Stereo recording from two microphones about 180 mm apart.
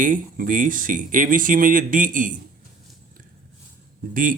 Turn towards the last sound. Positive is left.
turn(degrees=-50)  # may be behind; listen again after turning